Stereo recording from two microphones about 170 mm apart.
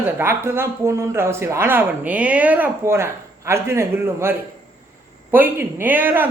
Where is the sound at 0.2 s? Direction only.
15° right (ahead or behind).